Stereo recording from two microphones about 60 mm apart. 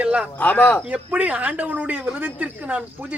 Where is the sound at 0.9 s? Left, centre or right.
Right.